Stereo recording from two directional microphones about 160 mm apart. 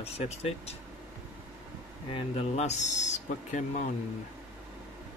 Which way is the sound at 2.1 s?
40° left (ahead or behind).